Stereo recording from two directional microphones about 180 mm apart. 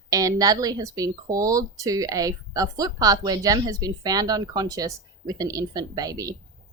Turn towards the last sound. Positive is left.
turn(degrees=-20)  # may be behind; listen again after turning